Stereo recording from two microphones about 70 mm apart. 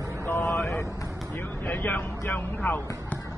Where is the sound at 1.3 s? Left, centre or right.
Left.